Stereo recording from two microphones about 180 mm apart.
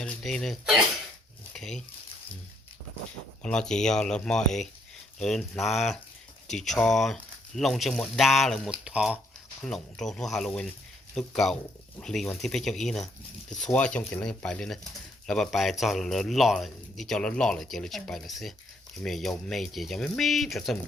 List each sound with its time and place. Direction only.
0.0 s speech: 5° left (ahead or behind)
3.4 s speech: 5° left (ahead or behind)